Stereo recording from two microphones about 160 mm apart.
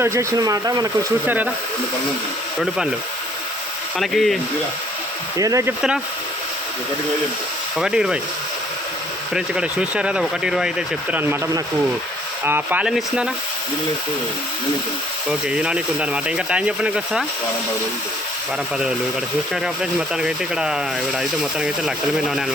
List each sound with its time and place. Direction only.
0.0 s speech: 15° right (ahead or behind)
2.6 s speech: 5° right (ahead or behind)
3.9 s speech: centre (ahead or behind)
5.4 s speech: 20° right (ahead or behind)
7.8 s speech: 5° right (ahead or behind)
9.3 s speech: 5° right (ahead or behind)
15.3 s speech: 5° right (ahead or behind)
19.6 s speech: 5° right (ahead or behind)